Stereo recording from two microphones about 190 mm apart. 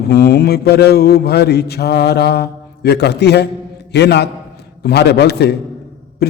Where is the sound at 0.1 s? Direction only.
55° left (ahead or behind).